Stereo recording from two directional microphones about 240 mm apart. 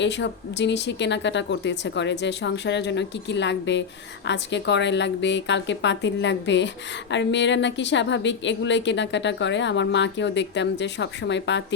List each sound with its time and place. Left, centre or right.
0.0 s a woman's voice: left